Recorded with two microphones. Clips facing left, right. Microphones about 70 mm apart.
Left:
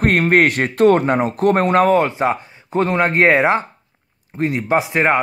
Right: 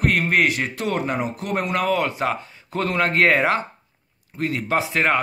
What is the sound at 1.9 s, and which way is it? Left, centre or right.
Speech, left.